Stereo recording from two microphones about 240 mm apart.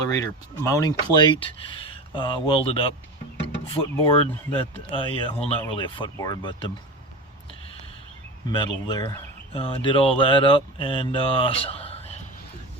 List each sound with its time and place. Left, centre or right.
0.1 s speech: centre
3.4 s music: left
4.0 s speech: left
8.4 s speech: centre